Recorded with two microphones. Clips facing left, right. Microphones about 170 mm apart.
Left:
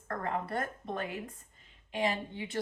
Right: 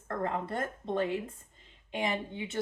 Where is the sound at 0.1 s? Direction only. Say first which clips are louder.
Right 1 dB; 25° right (ahead or behind).